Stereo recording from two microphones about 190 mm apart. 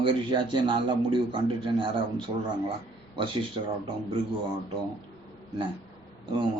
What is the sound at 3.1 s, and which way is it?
Speech, 25° right (ahead or behind).